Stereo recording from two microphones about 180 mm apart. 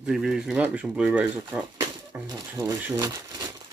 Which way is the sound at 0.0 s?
5° right (ahead or behind).